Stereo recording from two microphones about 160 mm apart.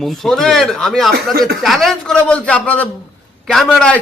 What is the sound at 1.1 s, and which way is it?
Speech, 80° right.